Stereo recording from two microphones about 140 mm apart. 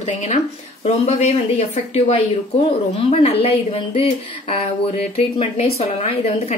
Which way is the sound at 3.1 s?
50° left (ahead or behind).